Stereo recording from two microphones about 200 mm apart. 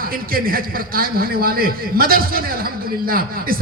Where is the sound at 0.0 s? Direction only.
45° right (ahead or behind).